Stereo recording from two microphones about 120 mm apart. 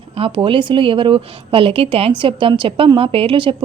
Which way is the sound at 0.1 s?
50° right (ahead or behind).